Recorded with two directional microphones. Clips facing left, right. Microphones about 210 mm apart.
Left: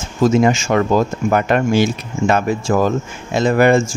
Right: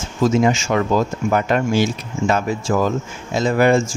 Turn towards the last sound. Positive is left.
turn(degrees=60)  # may be behind; listen again after turning